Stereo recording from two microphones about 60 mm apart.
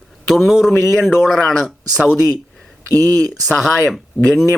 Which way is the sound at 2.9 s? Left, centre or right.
Right.